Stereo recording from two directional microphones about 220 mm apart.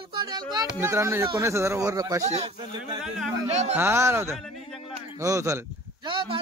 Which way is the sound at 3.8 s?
10° right (ahead or behind).